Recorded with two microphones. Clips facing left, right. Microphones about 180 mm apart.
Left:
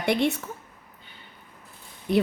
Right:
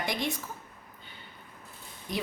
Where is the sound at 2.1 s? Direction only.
60° left (ahead or behind).